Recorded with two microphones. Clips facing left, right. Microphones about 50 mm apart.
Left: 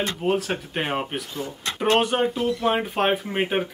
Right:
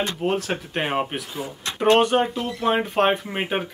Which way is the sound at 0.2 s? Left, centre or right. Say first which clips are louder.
Even; centre.